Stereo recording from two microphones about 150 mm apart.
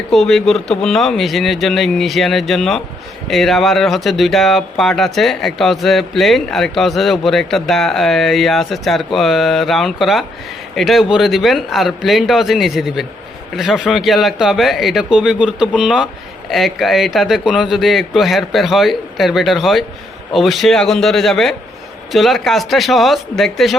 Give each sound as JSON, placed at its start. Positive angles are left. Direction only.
{"t": 0.1, "sound": "speech", "side_deg": 0}